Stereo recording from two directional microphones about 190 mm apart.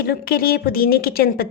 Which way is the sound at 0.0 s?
55° left (ahead or behind).